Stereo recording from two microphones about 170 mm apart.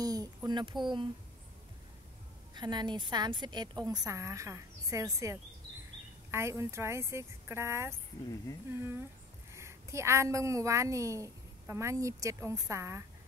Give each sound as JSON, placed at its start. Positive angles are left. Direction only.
{"t": 0.0, "sound": "a sound", "side_deg": -20}
{"t": 0.8, "sound": "a woman's voice", "side_deg": -30}
{"t": 2.5, "sound": "a woman's voice", "side_deg": -25}
{"t": 9.5, "sound": "a woman's voice", "side_deg": -15}